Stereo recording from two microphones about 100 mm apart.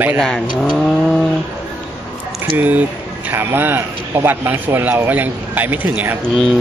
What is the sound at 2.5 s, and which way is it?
Speech, 20° right (ahead or behind).